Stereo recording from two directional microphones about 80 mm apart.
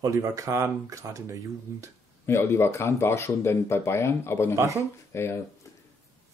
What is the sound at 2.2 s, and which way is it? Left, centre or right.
Speech, left.